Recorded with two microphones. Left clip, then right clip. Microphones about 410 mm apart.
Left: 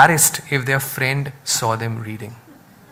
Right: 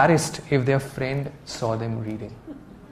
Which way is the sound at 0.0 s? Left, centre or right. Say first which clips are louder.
Left 6 dB; right.